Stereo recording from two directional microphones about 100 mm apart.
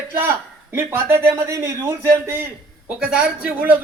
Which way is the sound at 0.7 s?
25° right (ahead or behind).